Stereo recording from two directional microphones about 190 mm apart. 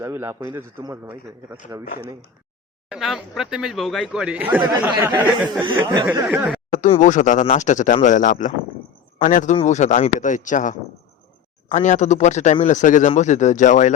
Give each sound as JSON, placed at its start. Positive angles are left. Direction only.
{"t": 0.0, "sound": "a man's voice", "side_deg": -15}
{"t": 1.8, "sound": "speech", "side_deg": 50}
{"t": 2.9, "sound": "a man's voice", "side_deg": 0}
{"t": 5.8, "sound": "speech", "side_deg": -20}
{"t": 6.1, "sound": "a man's voice", "side_deg": -10}
{"t": 6.7, "sound": "speech", "side_deg": 40}